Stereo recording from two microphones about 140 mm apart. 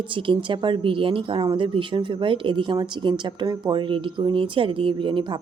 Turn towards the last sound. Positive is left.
turn(degrees=-35)  # may be behind; listen again after turning